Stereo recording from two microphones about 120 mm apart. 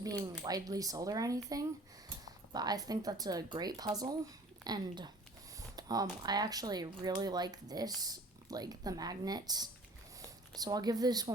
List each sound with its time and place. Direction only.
0.0 s speech: 30° right (ahead or behind)